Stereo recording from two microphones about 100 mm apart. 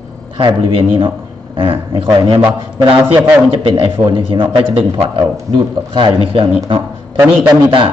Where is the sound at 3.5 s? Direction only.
65° right (ahead or behind).